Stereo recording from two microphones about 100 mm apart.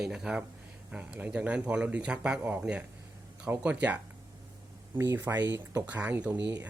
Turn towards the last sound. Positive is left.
turn(degrees=-15)  # may be behind; listen again after turning